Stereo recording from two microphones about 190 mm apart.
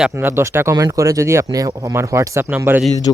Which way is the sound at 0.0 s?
10° right (ahead or behind).